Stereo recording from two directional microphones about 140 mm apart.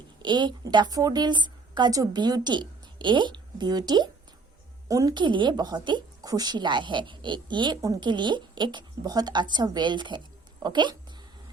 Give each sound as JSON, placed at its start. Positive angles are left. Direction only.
{"t": 0.2, "sound": "a woman's voice", "side_deg": -35}